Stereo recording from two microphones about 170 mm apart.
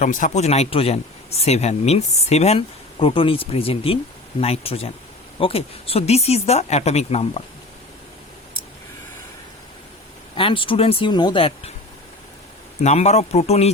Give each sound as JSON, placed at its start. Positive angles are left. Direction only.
{"t": 0.0, "sound": "a man's voice", "side_deg": 50}
{"t": 10.3, "sound": "a man's voice", "side_deg": 30}
{"t": 12.8, "sound": "a man's voice", "side_deg": 40}